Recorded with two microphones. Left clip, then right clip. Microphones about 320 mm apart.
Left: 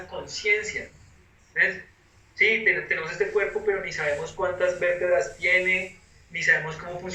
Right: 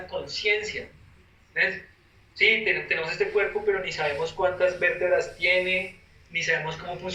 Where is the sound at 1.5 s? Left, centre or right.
Centre.